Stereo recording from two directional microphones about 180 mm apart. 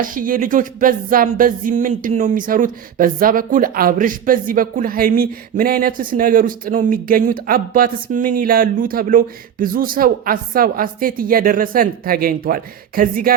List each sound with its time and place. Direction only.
0.0 s music: 50° right (ahead or behind)